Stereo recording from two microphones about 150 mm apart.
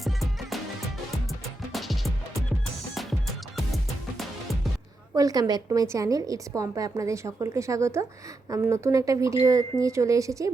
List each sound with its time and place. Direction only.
0.0 s music: centre (ahead or behind)
1.7 s music: centre (ahead or behind)
5.1 s a woman's voice: 25° right (ahead or behind)